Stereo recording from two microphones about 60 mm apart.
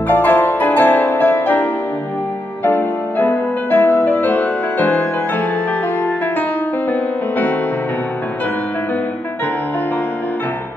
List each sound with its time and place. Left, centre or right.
0.1 s music: left
6.9 s music: left